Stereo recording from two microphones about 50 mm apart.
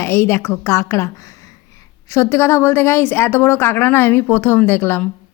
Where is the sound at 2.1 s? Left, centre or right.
Left.